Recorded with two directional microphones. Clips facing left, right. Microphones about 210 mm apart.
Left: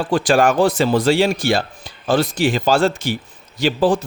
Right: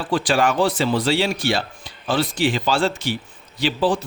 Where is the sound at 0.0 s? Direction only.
45° left (ahead or behind).